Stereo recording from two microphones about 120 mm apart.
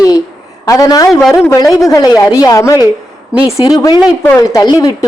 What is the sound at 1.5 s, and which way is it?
A woman's voice, 30° left (ahead or behind).